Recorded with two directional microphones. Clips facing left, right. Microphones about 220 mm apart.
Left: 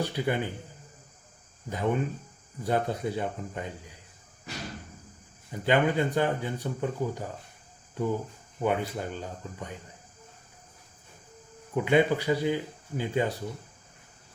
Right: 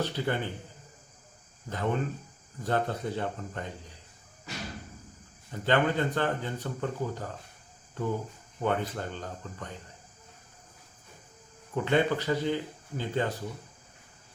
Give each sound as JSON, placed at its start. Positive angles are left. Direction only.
{"t": 0.0, "sound": "a man's voice", "side_deg": 10}
{"t": 1.7, "sound": "speech", "side_deg": 10}
{"t": 5.5, "sound": "speech", "side_deg": 10}
{"t": 11.7, "sound": "speech", "side_deg": 10}